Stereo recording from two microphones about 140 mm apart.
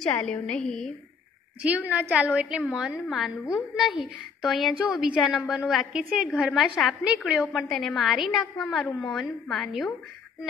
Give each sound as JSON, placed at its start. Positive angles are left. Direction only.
{"t": 0.1, "sound": "a woman's voice", "side_deg": 5}
{"t": 1.6, "sound": "a woman's voice", "side_deg": -10}